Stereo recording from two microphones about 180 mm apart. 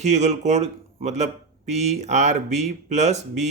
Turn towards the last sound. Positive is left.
turn(degrees=-40)  # may be behind; listen again after turning